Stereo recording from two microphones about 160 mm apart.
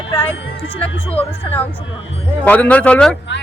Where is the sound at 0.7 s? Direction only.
35° left (ahead or behind).